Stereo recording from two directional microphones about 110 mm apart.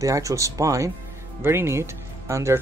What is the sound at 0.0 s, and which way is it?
Speech, 30° right (ahead or behind).